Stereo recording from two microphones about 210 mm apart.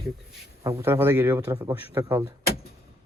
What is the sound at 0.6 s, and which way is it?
A man's voice, 10° right (ahead or behind).